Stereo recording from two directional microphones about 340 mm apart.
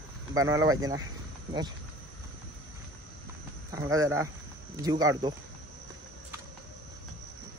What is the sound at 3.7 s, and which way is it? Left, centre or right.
Speech, centre.